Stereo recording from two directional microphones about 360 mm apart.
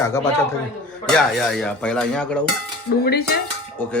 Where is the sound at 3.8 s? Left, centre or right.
Centre.